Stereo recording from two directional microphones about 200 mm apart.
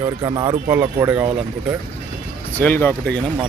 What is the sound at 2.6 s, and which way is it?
Speech, 10° left (ahead or behind).